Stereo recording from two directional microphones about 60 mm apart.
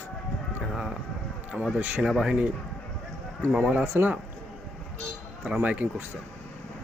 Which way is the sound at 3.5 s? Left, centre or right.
Centre.